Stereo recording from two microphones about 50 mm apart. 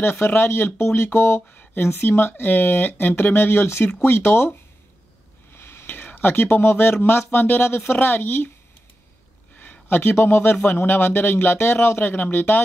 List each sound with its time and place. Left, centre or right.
0.0 s speech: left
1.7 s speech: left
5.5 s speech: left
9.8 s speech: left